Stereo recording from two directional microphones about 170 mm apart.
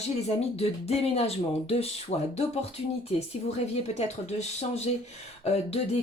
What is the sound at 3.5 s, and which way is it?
Speech, 40° left (ahead or behind).